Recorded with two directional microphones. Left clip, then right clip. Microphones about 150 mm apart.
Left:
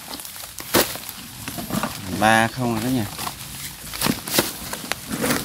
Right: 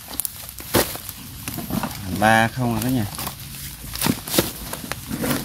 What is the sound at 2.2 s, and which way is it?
Speech, 10° right (ahead or behind).